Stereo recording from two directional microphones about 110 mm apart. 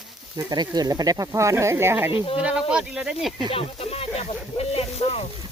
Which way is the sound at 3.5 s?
60° left (ahead or behind).